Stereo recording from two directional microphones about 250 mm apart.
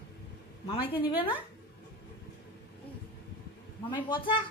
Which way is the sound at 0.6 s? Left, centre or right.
Left.